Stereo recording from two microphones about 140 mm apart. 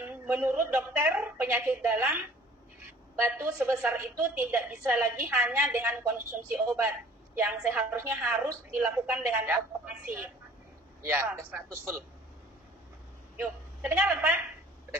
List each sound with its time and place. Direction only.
0.0 s a woman's voice: 15° right (ahead or behind)
13.4 s a woman's voice: 15° right (ahead or behind)